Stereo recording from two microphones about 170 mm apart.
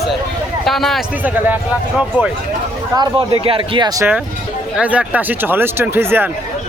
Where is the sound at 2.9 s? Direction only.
30° right (ahead or behind).